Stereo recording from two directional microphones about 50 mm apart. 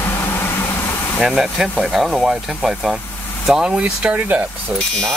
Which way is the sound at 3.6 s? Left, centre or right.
Right.